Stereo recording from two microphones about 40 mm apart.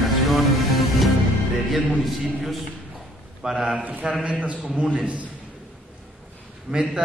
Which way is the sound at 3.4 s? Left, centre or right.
Centre.